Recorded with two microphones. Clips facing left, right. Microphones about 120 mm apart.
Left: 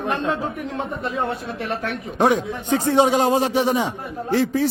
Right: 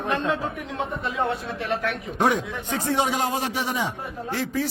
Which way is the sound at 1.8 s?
30° left (ahead or behind).